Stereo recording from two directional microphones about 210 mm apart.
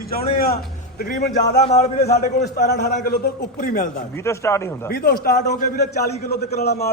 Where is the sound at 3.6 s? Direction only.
40° left (ahead or behind).